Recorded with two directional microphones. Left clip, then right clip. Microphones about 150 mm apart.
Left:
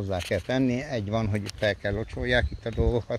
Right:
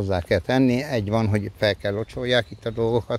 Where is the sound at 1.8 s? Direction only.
25° right (ahead or behind).